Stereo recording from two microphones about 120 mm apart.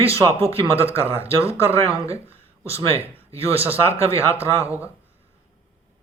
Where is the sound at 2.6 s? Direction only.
55° right (ahead or behind).